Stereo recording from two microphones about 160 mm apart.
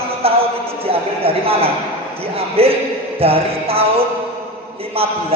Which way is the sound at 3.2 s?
35° right (ahead or behind).